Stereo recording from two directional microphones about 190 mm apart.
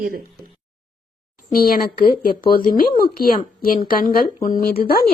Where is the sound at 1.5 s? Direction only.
50° left (ahead or behind).